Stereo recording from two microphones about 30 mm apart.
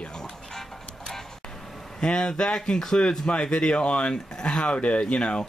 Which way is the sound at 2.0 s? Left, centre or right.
Left.